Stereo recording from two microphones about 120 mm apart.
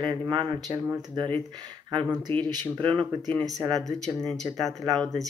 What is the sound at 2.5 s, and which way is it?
Speech, 40° right (ahead or behind).